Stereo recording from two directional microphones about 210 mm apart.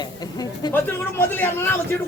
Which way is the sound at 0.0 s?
20° left (ahead or behind).